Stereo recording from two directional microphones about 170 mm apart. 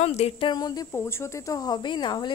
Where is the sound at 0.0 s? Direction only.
40° left (ahead or behind).